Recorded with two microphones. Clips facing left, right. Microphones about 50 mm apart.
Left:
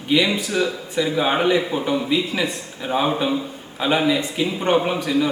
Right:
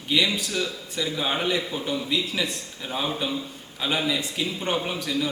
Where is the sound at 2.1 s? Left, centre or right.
Centre.